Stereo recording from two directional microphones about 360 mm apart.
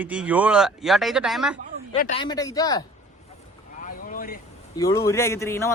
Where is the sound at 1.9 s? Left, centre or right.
Centre.